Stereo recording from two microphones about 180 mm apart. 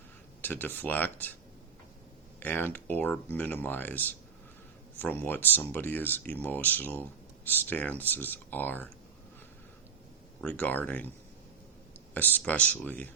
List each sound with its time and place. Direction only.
0.4 s speech: 10° left (ahead or behind)
2.4 s speech: 10° left (ahead or behind)
10.4 s speech: 5° left (ahead or behind)
12.1 s speech: 10° left (ahead or behind)